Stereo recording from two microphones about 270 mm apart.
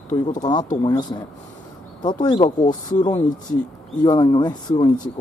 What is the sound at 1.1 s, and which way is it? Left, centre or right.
Speech, centre.